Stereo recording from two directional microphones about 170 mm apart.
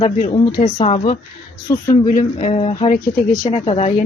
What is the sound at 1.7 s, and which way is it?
Speech, 50° left (ahead or behind).